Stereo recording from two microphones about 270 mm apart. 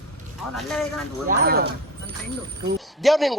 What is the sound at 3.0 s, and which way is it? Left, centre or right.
Speech, centre.